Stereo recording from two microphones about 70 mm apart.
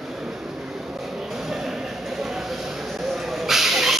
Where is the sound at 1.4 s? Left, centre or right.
Centre.